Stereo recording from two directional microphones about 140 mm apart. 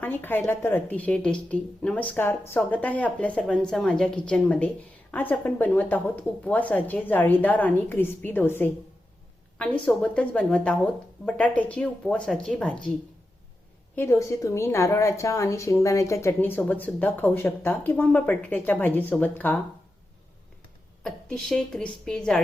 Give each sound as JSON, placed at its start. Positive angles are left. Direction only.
{"t": 0.0, "sound": "a woman's voice", "side_deg": 15}
{"t": 13.9, "sound": "a woman's voice", "side_deg": 15}
{"t": 21.0, "sound": "speech", "side_deg": 5}